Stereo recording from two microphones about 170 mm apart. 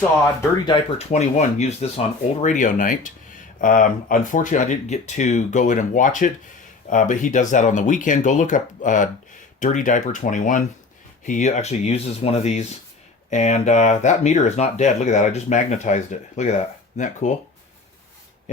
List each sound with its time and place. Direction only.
0.6 s speech: 30° left (ahead or behind); by 17.3 s 45° left (ahead or behind)